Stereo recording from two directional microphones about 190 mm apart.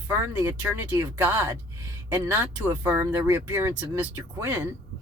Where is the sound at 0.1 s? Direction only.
15° right (ahead or behind).